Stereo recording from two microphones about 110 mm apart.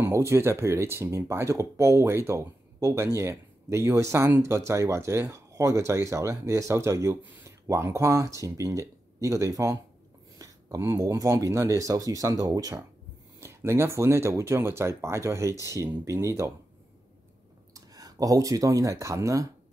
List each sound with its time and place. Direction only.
0.0 s speech: 25° right (ahead or behind)
17.7 s speech: 35° right (ahead or behind)